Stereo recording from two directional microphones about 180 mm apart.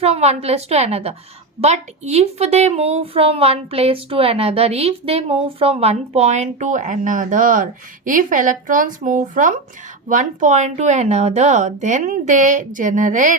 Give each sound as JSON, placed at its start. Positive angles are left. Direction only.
{"t": 0.0, "sound": "a woman's voice", "side_deg": -35}